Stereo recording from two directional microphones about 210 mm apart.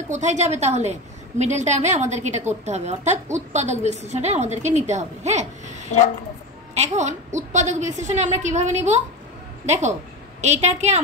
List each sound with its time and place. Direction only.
0.1 s a woman's voice: 35° right (ahead or behind)